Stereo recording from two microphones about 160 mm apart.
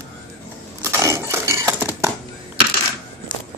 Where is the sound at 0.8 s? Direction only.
15° right (ahead or behind).